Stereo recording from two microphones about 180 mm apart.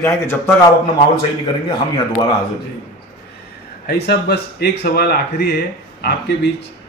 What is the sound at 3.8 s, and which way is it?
Speech, 60° left (ahead or behind).